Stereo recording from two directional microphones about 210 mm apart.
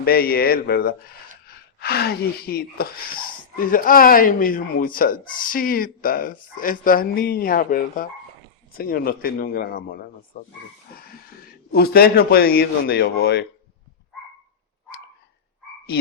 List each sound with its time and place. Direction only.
0.0 s a man's voice: 45° left (ahead or behind)
11.7 s a man's voice: 50° left (ahead or behind)